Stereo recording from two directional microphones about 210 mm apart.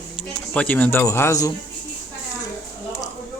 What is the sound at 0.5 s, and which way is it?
Speech, 5° left (ahead or behind).